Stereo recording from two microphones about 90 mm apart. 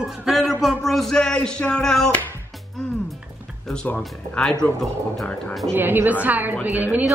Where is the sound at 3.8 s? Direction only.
10° left (ahead or behind).